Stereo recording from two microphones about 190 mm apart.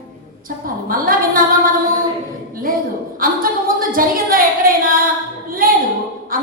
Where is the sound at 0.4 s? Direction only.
50° right (ahead or behind).